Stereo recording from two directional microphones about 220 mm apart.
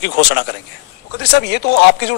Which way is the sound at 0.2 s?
50° left (ahead or behind).